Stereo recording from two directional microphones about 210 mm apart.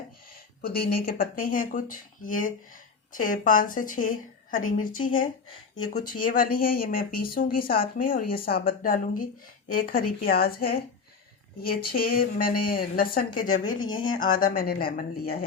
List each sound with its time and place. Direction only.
1.0 s speech: 45° left (ahead or behind)
13.7 s speech: 20° left (ahead or behind)
14.2 s speech: 40° left (ahead or behind)